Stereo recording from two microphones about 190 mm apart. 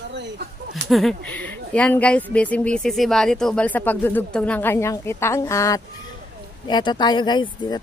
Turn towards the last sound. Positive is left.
turn(degrees=25)  # may be behind; listen again after turning